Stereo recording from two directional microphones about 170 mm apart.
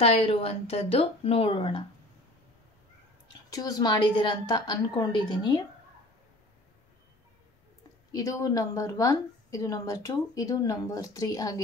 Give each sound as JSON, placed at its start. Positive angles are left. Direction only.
{"t": 0.0, "sound": "speech", "side_deg": 35}
{"t": 3.4, "sound": "a woman's voice", "side_deg": 20}
{"t": 8.2, "sound": "a woman's voice", "side_deg": 20}